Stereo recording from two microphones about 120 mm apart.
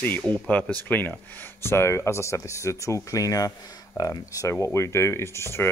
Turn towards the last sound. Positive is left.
turn(degrees=20)  # may be behind; listen again after turning